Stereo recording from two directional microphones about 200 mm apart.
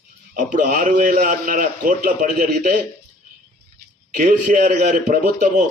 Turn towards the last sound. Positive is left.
turn(degrees=-40)  # may be behind; listen again after turning